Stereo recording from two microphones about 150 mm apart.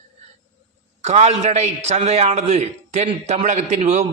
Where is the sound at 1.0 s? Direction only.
50° right (ahead or behind).